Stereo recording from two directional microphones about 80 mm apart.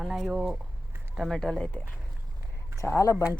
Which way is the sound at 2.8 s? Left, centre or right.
Left.